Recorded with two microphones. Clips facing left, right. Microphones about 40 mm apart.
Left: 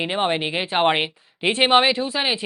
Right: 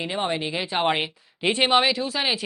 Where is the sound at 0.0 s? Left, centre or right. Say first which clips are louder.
Left 4 dB; left.